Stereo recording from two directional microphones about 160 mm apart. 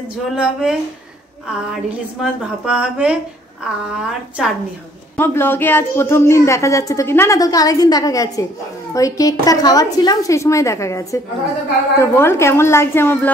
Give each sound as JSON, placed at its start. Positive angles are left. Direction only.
{"t": 0.4, "sound": "speech", "side_deg": -5}
{"t": 2.6, "sound": "a woman's voice", "side_deg": -5}
{"t": 5.1, "sound": "a woman's voice", "side_deg": 15}